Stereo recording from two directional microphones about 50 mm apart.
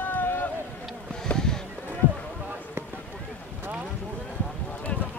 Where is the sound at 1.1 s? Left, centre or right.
Centre.